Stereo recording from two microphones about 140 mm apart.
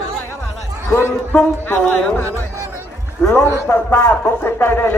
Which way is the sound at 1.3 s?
10° left (ahead or behind).